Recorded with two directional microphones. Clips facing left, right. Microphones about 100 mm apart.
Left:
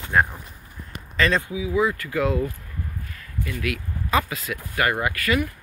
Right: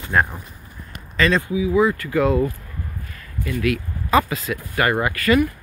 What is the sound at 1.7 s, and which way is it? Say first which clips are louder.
Speech: right 4 dB; 40° right (ahead or behind).